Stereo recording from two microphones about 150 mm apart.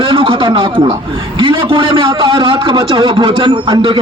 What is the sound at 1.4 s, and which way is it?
Speech, 35° right (ahead or behind).